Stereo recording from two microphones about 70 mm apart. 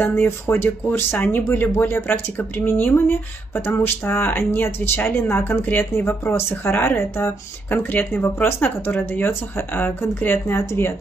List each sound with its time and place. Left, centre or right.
0.0 s speech: left